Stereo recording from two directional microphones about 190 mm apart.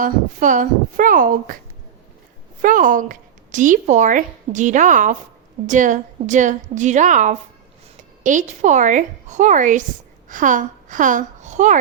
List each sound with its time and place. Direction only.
0.0 s speech: 40° right (ahead or behind)
2.6 s a woman's voice: 45° right (ahead or behind)